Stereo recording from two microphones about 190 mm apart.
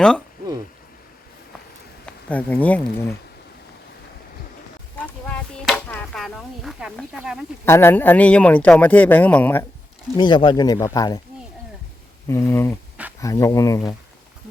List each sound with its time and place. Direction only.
2.3 s speech: 10° left (ahead or behind)
4.9 s a sound: 5° left (ahead or behind)
7.6 s speech: 10° left (ahead or behind)
10.2 s speech: 25° left (ahead or behind)
12.3 s speech: 15° left (ahead or behind)